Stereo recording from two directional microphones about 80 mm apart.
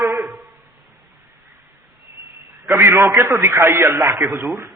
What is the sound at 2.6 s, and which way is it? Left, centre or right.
A man's voice, right.